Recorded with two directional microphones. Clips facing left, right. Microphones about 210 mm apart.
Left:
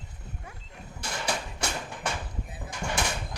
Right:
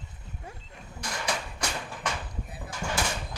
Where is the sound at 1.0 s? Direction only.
25° left (ahead or behind).